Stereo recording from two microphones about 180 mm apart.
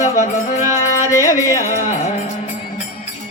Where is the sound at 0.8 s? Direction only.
15° left (ahead or behind).